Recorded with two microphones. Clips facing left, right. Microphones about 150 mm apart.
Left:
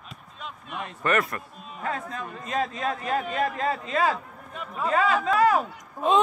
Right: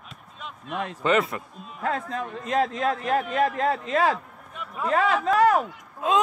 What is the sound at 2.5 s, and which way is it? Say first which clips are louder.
Speech: right 4 dB; 70° right (ahead or behind).